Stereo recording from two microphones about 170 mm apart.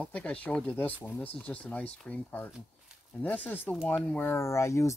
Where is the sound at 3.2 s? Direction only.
10° left (ahead or behind).